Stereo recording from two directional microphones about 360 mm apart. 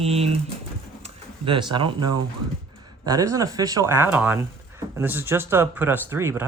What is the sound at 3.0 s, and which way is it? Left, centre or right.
Speech, centre.